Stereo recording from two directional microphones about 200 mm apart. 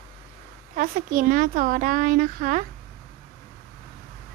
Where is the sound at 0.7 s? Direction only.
45° right (ahead or behind).